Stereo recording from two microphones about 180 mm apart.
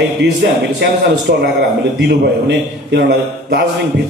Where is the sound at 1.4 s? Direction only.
65° right (ahead or behind).